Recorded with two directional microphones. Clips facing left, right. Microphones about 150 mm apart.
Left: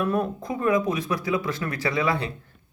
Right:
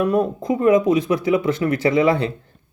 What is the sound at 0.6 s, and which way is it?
Speech, 25° right (ahead or behind).